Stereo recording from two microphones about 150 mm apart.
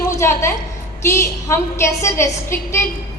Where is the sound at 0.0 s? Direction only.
15° left (ahead or behind).